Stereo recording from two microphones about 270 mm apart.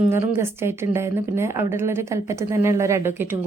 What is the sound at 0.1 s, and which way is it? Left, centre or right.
A woman's voice, centre.